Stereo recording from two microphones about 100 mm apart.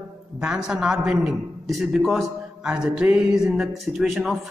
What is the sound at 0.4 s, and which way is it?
A man's voice, 10° right (ahead or behind).